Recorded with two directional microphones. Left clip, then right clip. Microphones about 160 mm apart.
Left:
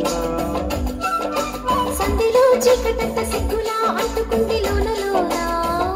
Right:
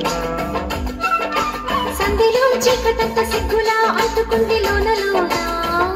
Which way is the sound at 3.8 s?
15° right (ahead or behind).